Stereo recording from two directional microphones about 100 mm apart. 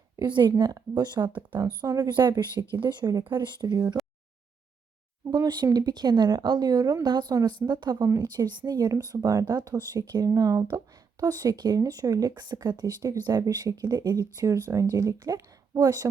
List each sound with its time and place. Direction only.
0.6 s speech: 45° right (ahead or behind)
1.3 s speech: 15° right (ahead or behind)
1.8 s speech: 45° right (ahead or behind)
5.3 s speech: 45° right (ahead or behind)
8.0 s a woman's voice: 35° right (ahead or behind)